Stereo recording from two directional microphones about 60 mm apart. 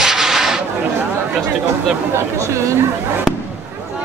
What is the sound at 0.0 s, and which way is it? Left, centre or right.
Rub, centre.